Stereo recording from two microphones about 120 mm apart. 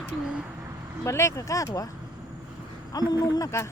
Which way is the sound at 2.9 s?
30° left (ahead or behind).